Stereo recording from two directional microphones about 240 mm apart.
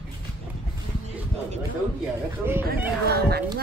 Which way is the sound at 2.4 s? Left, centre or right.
Centre.